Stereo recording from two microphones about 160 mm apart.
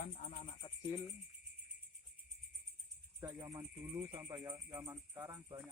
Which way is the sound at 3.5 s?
20° right (ahead or behind).